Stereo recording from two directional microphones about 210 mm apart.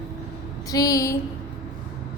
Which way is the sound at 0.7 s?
15° left (ahead or behind).